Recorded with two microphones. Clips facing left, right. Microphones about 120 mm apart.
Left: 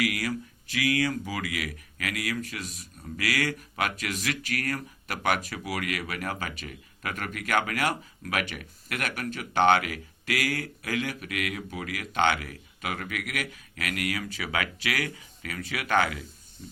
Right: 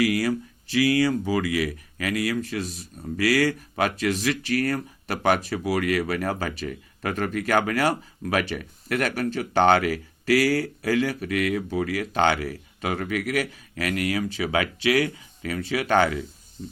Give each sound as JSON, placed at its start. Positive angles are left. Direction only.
{"t": 0.0, "sound": "speech", "side_deg": -30}